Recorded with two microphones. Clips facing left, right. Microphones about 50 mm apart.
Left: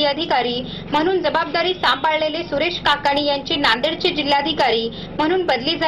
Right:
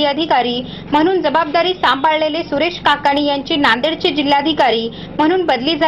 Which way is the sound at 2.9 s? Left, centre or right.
Right.